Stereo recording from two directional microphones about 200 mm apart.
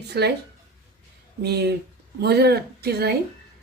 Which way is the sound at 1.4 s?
55° right (ahead or behind).